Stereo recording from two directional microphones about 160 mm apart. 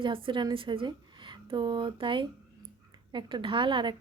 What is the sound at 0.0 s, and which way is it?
Speech, 30° right (ahead or behind).